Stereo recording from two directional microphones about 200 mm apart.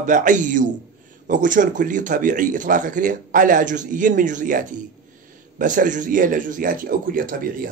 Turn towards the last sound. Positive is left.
turn(degrees=-45)  # may be behind; listen again after turning